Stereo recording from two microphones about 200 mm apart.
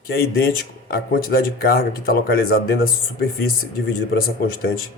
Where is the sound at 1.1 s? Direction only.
45° left (ahead or behind).